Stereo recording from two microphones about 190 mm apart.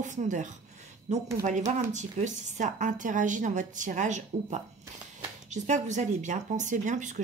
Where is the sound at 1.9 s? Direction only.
40° right (ahead or behind).